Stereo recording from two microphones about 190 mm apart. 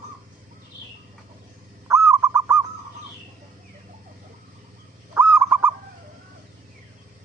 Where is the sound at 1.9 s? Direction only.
15° right (ahead or behind).